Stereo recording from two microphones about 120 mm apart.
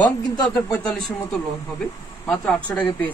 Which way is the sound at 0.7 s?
5° left (ahead or behind).